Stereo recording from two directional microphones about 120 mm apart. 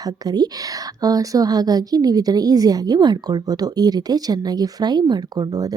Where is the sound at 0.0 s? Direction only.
35° right (ahead or behind).